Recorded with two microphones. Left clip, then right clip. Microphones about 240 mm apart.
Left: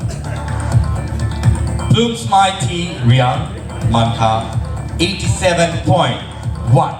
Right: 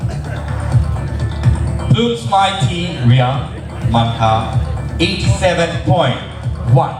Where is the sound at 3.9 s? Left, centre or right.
Left.